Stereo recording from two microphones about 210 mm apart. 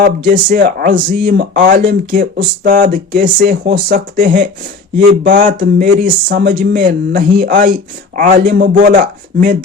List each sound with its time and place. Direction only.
0.0 s speech: 40° right (ahead or behind)